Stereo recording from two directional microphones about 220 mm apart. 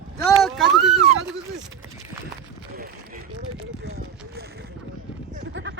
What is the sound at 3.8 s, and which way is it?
Run, 45° right (ahead or behind).